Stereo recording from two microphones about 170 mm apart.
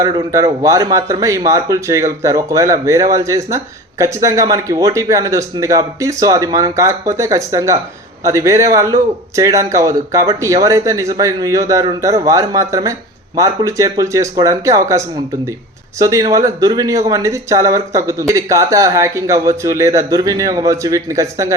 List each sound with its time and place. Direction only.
0.0 s a man's voice: 20° right (ahead or behind)